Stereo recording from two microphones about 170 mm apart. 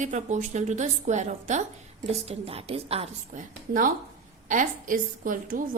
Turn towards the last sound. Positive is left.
turn(degrees=-50)  # may be behind; listen again after turning